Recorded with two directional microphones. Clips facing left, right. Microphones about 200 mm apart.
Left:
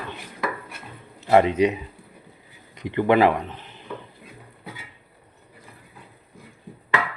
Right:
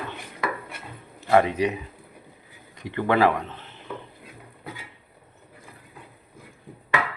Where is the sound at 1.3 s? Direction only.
20° left (ahead or behind).